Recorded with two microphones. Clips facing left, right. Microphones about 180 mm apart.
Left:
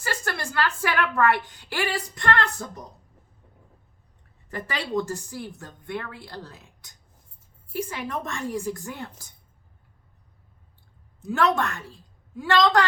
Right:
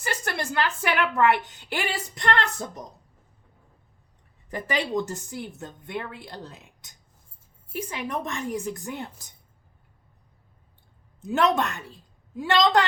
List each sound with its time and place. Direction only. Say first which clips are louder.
0.0 s a woman's voice: right 1 dB; 20° right (ahead or behind)
4.5 s a woman's voice: right 1 dB; 15° right (ahead or behind)
11.2 s a woman's voice: right 1 dB; 20° right (ahead or behind)